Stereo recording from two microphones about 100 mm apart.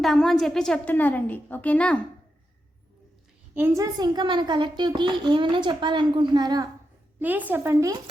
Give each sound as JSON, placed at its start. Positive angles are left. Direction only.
{"t": 0.0, "sound": "a woman's voice", "side_deg": 5}
{"t": 3.5, "sound": "a woman's voice", "side_deg": -25}
{"t": 7.2, "sound": "speech", "side_deg": -15}